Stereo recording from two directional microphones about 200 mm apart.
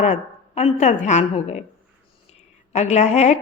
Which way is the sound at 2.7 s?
35° left (ahead or behind).